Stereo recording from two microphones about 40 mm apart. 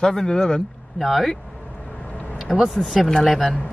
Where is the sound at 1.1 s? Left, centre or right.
Centre.